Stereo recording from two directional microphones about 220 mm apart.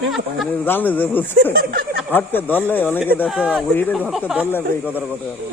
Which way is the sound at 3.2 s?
5° right (ahead or behind).